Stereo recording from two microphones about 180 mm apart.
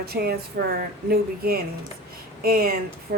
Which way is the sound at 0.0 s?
60° right (ahead or behind).